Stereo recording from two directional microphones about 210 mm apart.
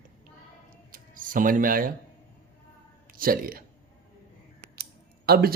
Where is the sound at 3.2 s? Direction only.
45° right (ahead or behind).